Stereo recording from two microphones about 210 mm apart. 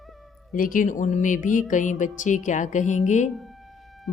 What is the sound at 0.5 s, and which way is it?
Speech, 40° left (ahead or behind).